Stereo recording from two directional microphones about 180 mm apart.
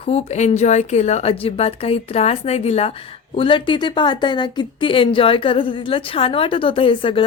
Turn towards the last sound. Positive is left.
turn(degrees=30)  # may be behind; listen again after turning